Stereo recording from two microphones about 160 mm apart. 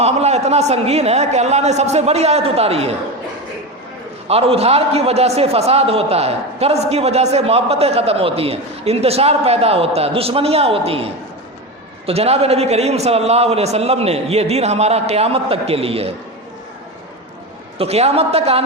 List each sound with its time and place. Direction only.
0.0 s a man's voice: 40° right (ahead or behind)
4.3 s a man's voice: 40° right (ahead or behind)
17.7 s a man's voice: 40° right (ahead or behind)